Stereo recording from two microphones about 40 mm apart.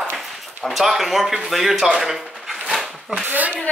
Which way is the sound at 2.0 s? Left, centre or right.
Centre.